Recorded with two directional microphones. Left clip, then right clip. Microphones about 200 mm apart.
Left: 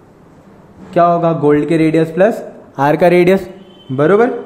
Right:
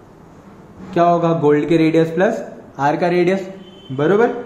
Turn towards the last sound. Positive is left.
turn(degrees=40)  # may be behind; listen again after turning